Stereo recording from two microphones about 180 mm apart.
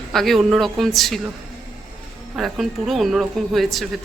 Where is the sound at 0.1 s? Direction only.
Centre (ahead or behind).